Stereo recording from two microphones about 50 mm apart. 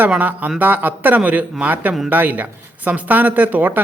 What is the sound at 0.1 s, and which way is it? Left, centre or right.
A man's voice, right.